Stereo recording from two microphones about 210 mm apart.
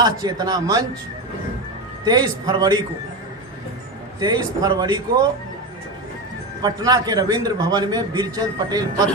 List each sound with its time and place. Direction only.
0.0 s a man's voice: 20° right (ahead or behind)
2.0 s a man's voice: 20° right (ahead or behind)
4.2 s a man's voice: 20° right (ahead or behind)
6.6 s a man's voice: 20° right (ahead or behind)